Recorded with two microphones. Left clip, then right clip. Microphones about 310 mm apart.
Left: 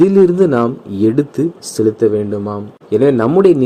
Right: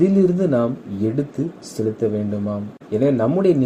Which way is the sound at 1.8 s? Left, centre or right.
Left.